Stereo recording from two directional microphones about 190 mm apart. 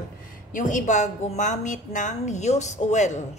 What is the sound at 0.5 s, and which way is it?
A woman's voice, 40° left (ahead or behind).